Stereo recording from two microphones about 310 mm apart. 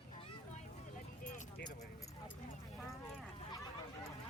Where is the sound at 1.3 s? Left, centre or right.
Left.